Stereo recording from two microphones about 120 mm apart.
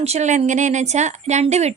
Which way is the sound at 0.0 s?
65° right (ahead or behind).